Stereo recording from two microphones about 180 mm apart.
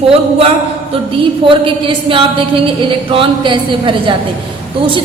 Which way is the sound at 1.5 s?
30° right (ahead or behind).